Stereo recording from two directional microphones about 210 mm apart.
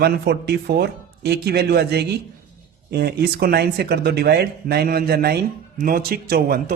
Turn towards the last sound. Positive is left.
turn(degrees=-45)  # may be behind; listen again after turning